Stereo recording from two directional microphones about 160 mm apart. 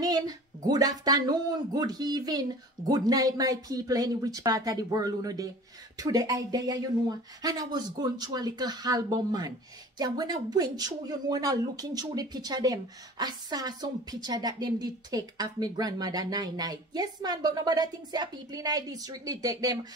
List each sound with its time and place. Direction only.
0.0 s speech: 25° right (ahead or behind)